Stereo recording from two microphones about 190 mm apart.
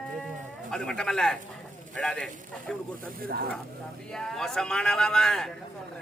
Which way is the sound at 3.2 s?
55° right (ahead or behind).